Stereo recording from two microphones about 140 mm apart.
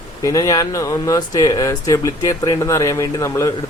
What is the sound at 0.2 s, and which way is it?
Speech, 25° left (ahead or behind).